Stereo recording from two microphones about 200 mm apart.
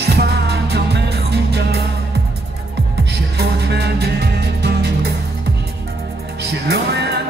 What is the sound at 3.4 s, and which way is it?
Music, 55° right (ahead or behind).